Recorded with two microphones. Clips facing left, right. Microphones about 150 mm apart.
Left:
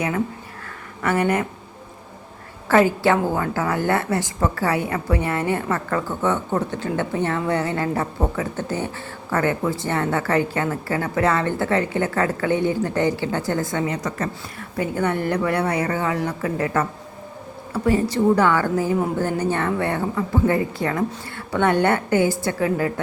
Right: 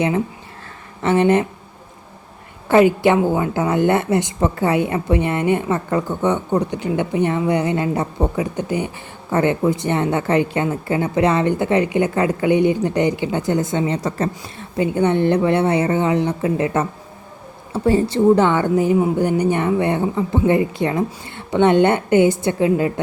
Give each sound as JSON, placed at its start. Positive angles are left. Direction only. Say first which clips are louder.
{"t": 1.0, "sound": "a woman's voice", "louder": "right 5 dB", "side_deg": -25}
{"t": 2.6, "sound": "a woman's voice", "louder": "right 4 dB", "side_deg": -20}